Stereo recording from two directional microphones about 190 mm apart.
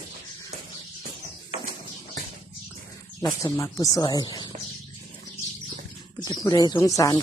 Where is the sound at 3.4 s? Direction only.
15° left (ahead or behind).